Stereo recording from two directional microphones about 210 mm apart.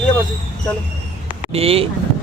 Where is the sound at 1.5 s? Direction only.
25° right (ahead or behind).